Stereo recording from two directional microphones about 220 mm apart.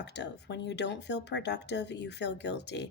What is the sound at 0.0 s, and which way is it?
Speech, 50° left (ahead or behind).